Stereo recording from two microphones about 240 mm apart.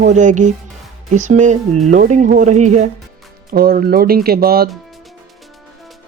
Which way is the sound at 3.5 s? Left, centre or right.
Right.